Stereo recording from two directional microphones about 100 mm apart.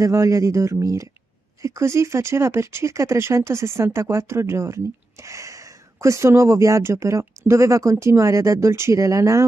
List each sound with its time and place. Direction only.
0.0 s speech: 30° right (ahead or behind)